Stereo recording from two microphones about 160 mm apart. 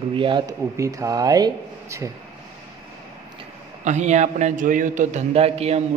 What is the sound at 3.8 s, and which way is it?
A man's voice, 50° right (ahead or behind).